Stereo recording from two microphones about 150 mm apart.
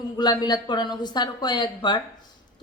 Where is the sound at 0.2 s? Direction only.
25° left (ahead or behind).